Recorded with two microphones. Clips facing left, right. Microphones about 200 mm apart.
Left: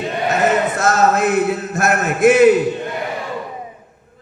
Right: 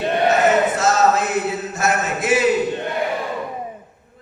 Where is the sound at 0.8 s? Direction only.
55° left (ahead or behind).